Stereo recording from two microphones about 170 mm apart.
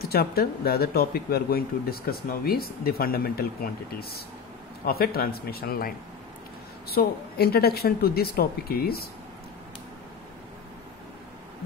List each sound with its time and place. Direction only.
0.0 s speech: 65° left (ahead or behind)